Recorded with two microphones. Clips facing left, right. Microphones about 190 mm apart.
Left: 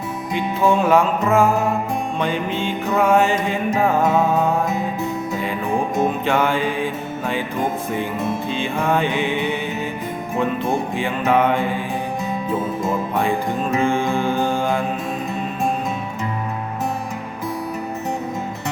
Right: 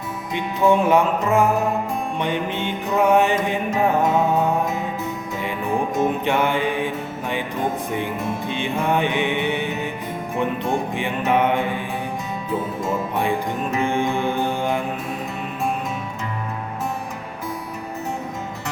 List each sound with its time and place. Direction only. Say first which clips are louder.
0.3 s music: even; 20° right (ahead or behind)
6.2 s music: left 1 dB; 20° right (ahead or behind)
8.4 s music: right 1 dB; 20° right (ahead or behind)
11.3 s music: left 2 dB; 20° right (ahead or behind)
13.7 s music: left 2 dB; 20° right (ahead or behind)
14.5 s mantra: left 2 dB; 20° right (ahead or behind)